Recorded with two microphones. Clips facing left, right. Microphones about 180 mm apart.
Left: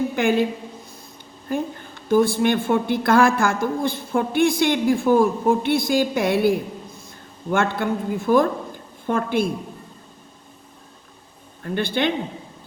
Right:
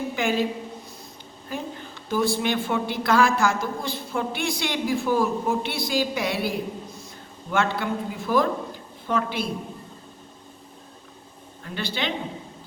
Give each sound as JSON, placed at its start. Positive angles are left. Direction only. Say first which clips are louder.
{"t": 0.2, "sound": "a woman's voice", "louder": "left 4 dB", "side_deg": 55}
{"t": 1.5, "sound": "a woman's voice", "louder": "left 7 dB", "side_deg": 50}
{"t": 11.6, "sound": "a woman's voice", "louder": "left 7 dB", "side_deg": 55}